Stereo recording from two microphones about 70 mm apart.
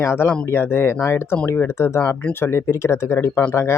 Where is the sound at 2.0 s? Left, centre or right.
Left.